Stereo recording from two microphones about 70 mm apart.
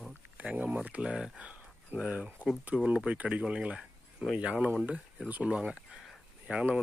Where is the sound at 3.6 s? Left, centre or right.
Centre.